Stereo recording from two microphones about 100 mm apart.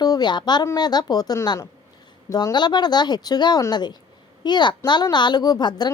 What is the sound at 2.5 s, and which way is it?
A woman's voice, 45° left (ahead or behind).